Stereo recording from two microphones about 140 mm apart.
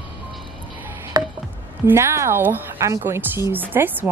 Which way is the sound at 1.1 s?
30° right (ahead or behind).